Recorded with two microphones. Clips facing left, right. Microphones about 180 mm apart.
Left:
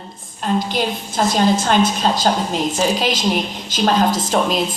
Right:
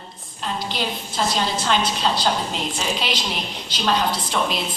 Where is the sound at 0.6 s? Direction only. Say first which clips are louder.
Left 6 dB; 50° left (ahead or behind).